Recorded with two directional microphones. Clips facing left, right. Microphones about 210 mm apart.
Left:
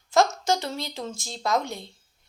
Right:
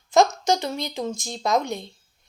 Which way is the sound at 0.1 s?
20° right (ahead or behind).